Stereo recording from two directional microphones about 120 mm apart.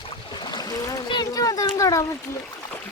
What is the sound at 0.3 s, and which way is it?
Splash, 35° left (ahead or behind).